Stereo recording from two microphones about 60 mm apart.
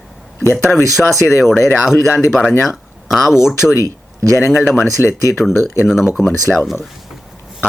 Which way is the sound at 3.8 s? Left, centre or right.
Right.